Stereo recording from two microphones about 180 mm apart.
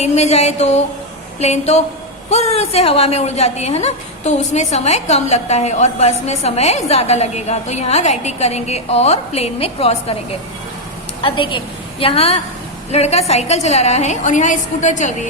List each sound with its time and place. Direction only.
0.0 s a woman's voice: 35° left (ahead or behind)
11.2 s a woman's voice: 30° left (ahead or behind)